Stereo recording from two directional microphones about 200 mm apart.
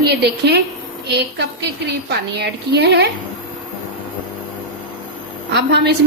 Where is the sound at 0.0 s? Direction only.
55° right (ahead or behind).